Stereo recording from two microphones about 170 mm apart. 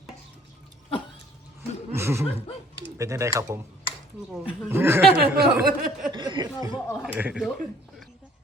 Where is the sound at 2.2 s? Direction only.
35° left (ahead or behind).